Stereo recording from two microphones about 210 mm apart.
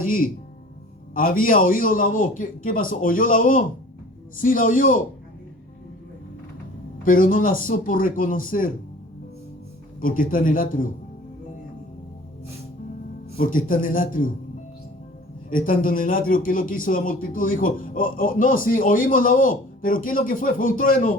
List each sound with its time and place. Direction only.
0.0 s music: 40° left (ahead or behind)
1.1 s a man's voice: 40° left (ahead or behind)
7.0 s a man's voice: 40° left (ahead or behind)
10.0 s a man's voice: 40° left (ahead or behind)
13.3 s a man's voice: 40° left (ahead or behind)
15.4 s a man's voice: 40° left (ahead or behind)